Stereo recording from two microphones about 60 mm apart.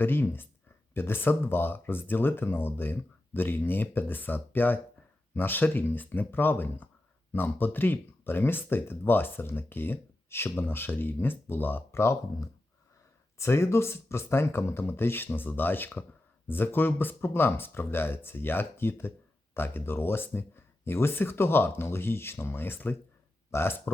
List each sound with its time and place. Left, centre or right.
0.0 s speech: left
13.4 s speech: left